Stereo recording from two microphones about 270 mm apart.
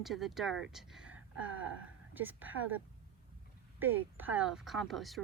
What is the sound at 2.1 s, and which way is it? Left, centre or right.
Speech, centre.